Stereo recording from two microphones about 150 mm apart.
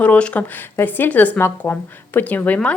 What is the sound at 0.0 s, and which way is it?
Speech, 10° left (ahead or behind).